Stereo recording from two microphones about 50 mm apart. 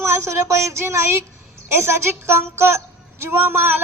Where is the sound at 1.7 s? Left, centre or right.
Right.